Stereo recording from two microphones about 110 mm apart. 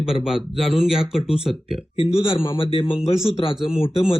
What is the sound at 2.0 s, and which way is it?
Speech, 60° left (ahead or behind).